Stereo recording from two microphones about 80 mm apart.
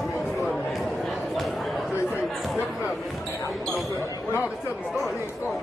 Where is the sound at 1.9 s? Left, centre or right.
Left.